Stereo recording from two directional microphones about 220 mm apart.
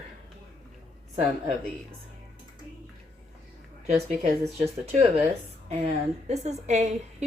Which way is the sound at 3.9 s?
30° right (ahead or behind).